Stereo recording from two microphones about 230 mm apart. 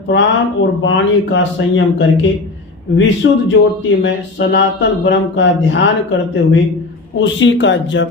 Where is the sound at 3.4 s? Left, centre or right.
Left.